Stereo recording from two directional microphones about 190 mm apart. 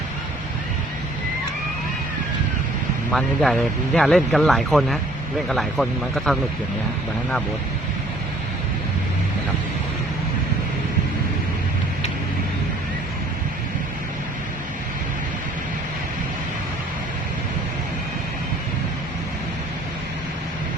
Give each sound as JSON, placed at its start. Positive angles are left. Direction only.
{"t": 3.1, "sound": "speech", "side_deg": 0}